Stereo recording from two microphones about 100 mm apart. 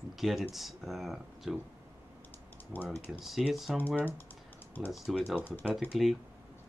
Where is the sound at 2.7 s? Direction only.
10° right (ahead or behind).